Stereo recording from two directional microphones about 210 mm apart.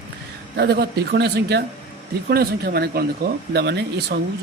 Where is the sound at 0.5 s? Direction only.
50° right (ahead or behind).